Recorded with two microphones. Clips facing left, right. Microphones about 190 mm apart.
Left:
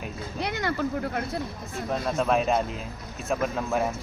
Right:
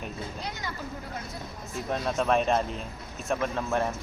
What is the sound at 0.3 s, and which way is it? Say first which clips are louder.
Speech: left 8 dB; 70° left (ahead or behind).